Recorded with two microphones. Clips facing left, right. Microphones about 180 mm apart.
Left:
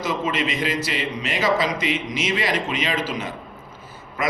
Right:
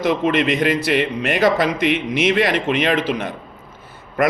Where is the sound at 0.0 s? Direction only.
60° right (ahead or behind).